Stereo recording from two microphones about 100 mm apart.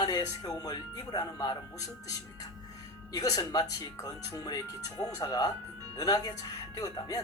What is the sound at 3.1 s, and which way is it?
Speech, 40° left (ahead or behind).